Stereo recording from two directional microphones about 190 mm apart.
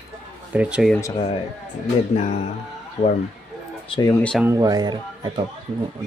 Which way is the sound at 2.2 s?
35° left (ahead or behind).